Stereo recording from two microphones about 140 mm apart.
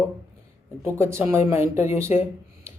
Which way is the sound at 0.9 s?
20° right (ahead or behind).